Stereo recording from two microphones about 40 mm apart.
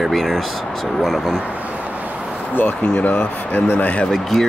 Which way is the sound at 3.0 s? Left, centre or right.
Left.